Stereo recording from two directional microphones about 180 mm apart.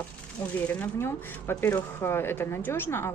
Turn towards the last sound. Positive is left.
turn(degrees=10)  # may be behind; listen again after turning